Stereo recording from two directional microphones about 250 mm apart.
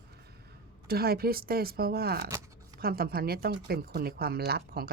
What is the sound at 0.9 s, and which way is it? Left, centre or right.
Speech, right.